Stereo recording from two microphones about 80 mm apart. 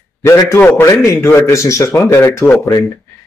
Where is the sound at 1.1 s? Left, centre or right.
Left.